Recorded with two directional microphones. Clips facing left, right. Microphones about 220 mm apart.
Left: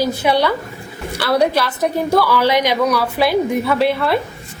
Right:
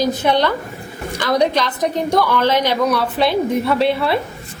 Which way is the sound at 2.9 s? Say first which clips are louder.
Left 1 dB; centre (ahead or behind).